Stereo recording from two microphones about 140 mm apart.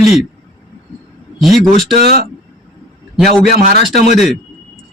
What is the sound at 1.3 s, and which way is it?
Speech, centre (ahead or behind).